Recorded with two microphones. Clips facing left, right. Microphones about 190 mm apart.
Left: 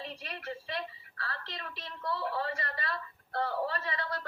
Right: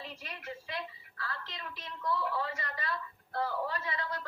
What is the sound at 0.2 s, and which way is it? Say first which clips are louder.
Speech: left 3 dB; 35° left (ahead or behind).